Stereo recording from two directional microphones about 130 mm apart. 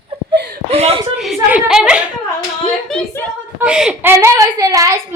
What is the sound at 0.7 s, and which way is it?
Whimper, 50° right (ahead or behind).